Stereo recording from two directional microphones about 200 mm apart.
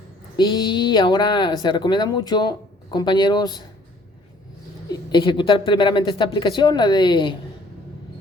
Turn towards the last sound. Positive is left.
turn(degrees=25)  # may be behind; listen again after turning